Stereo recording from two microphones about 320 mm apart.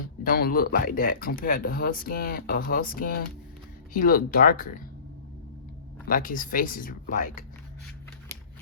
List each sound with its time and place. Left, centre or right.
0.3 s speech: left
6.1 s speech: left